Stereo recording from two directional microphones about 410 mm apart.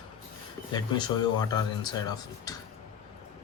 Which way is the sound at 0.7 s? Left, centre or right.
Centre.